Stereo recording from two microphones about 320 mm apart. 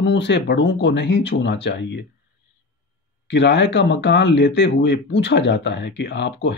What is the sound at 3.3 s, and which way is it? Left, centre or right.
Speech, left.